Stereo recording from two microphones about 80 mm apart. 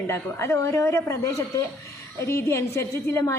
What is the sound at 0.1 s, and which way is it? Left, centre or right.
A woman's voice, left.